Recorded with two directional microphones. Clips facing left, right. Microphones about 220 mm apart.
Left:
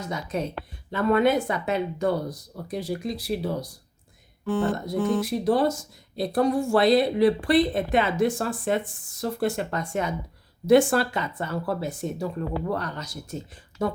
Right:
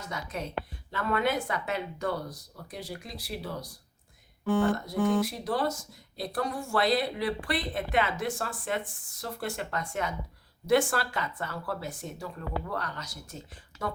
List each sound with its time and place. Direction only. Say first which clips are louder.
0.0 s speech: left 7 dB; 20° left (ahead or behind)
2.6 s speech: left 10 dB; 40° left (ahead or behind)
3.2 s speech: left 6 dB; 25° left (ahead or behind)
7.9 s speech: left 6 dB; 20° left (ahead or behind)